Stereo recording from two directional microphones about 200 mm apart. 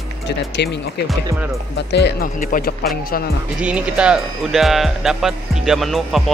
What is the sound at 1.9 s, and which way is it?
Speech, 60° left (ahead or behind).